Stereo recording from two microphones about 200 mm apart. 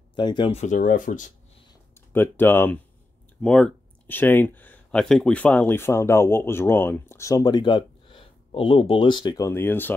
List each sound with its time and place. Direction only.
0.1 s speech: 25° left (ahead or behind); by 1.3 s 40° left (ahead or behind)
2.1 s speech: 10° left (ahead or behind)